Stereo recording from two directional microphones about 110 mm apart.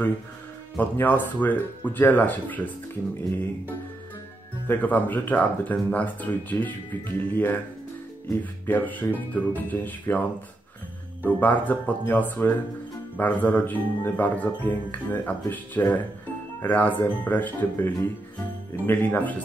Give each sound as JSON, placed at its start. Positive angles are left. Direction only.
{"t": 0.7, "sound": "speech", "side_deg": 15}
{"t": 4.6, "sound": "speech", "side_deg": 15}
{"t": 11.2, "sound": "speech", "side_deg": 15}